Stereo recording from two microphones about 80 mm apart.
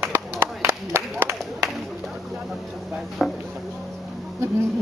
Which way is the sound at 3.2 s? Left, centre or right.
Centre.